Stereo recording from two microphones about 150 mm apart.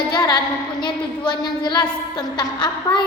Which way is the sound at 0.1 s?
25° left (ahead or behind).